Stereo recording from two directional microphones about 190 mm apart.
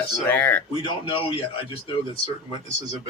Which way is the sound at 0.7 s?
25° left (ahead or behind).